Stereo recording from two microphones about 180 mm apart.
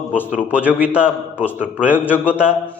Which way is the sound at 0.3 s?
5° right (ahead or behind).